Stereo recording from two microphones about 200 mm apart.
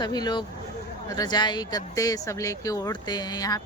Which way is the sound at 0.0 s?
20° left (ahead or behind).